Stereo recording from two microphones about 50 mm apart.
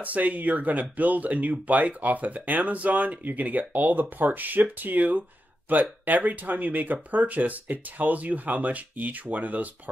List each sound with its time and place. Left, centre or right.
0.0 s speech: right